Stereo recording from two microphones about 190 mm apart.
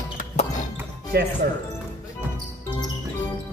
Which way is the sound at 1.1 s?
60° right (ahead or behind).